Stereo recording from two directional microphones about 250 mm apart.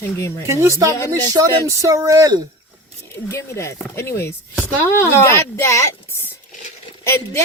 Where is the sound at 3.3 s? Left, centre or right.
Centre.